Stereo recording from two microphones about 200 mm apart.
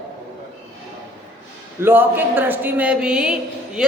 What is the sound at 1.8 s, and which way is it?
A man's voice, 10° right (ahead or behind).